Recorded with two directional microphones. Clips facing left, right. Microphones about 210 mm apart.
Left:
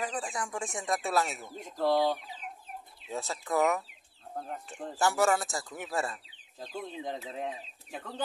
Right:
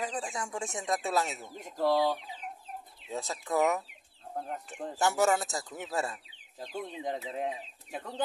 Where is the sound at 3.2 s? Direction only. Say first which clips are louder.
Even; 20° right (ahead or behind).